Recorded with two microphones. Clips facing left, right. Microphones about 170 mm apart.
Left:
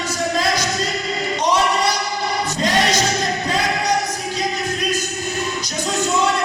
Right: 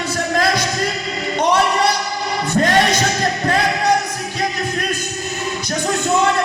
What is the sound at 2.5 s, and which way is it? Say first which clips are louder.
Music: right 5 dB; 60° right (ahead or behind).